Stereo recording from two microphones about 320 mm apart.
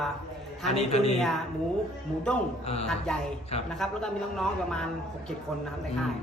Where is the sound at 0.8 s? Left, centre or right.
Centre.